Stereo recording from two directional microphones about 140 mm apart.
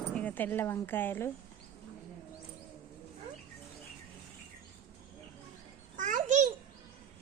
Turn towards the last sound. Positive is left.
turn(degrees=-60)  # may be behind; listen again after turning